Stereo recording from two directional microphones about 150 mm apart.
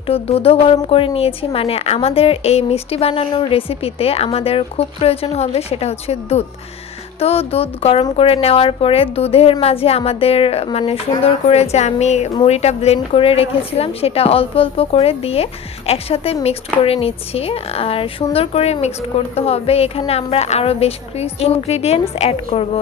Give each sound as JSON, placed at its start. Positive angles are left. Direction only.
{"t": 0.0, "sound": "a woman's voice", "side_deg": 40}